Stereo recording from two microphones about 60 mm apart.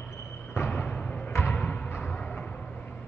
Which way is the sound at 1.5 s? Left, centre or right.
Left.